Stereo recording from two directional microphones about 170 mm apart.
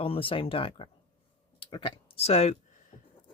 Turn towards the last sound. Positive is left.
turn(degrees=45)  # may be behind; listen again after turning